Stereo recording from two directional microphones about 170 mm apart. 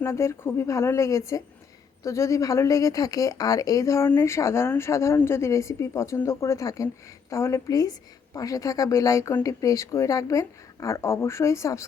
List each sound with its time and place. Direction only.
0.0 s a woman's voice: 15° left (ahead or behind)